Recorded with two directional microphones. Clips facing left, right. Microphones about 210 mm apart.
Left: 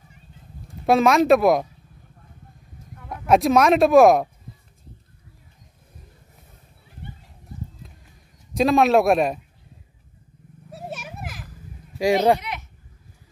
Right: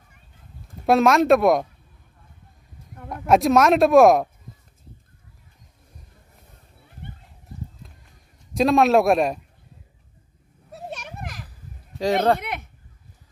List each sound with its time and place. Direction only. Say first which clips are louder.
0.8 s speech: even; centre (ahead or behind)
3.1 s speech: even; centre (ahead or behind)
7.8 s a sound: left 1 dB; centre (ahead or behind)
8.5 s speech: even; centre (ahead or behind)
10.7 s children playing: left 1 dB; 5° left (ahead or behind)
12.0 s speech: left 2 dB; 10° left (ahead or behind)
12.4 s a sound: right 2 dB; 55° right (ahead or behind)